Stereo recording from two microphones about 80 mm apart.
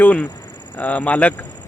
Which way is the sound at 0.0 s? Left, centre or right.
Centre.